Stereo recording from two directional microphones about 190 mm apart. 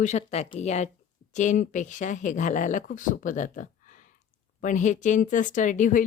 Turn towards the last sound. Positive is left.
turn(degrees=40)  # may be behind; listen again after turning